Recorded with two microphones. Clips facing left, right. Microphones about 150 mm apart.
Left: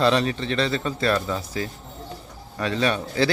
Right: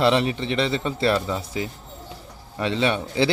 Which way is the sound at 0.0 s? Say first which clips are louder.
Right 1 dB; 20° right (ahead or behind).